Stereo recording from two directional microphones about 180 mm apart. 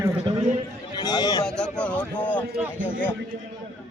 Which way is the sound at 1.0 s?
25° left (ahead or behind).